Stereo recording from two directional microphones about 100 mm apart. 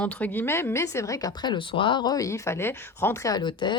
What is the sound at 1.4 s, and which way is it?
Speech, 55° left (ahead or behind).